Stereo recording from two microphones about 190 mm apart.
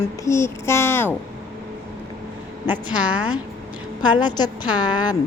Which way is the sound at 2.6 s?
10° right (ahead or behind).